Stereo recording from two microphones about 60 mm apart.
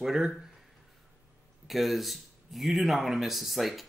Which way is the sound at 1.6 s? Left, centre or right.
Centre.